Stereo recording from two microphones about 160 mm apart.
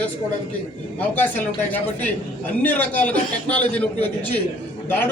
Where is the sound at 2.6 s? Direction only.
10° left (ahead or behind).